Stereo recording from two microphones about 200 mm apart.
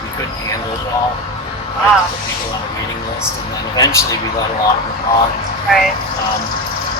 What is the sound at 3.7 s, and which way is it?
Speech, 20° left (ahead or behind).